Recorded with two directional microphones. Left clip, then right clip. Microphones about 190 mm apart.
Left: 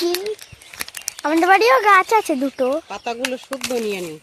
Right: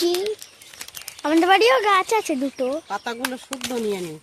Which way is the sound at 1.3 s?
5° right (ahead or behind).